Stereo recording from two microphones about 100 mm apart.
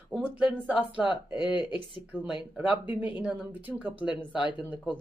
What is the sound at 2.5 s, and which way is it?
Speech, 15° right (ahead or behind).